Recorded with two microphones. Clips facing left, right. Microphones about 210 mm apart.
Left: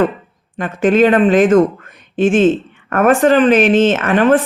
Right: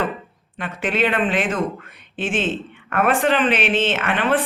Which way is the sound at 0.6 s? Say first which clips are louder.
Left 10 dB; 45° left (ahead or behind).